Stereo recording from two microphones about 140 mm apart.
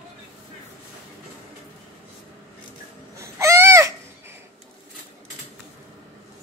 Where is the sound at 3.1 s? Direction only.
20° right (ahead or behind).